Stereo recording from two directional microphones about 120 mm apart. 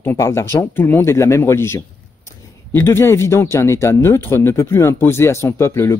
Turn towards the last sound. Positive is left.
turn(degrees=20)  # may be behind; listen again after turning